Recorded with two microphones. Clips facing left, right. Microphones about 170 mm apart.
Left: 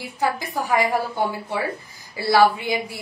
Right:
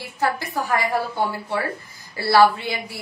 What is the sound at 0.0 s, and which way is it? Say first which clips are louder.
A woman's voice: even; 15° left (ahead or behind).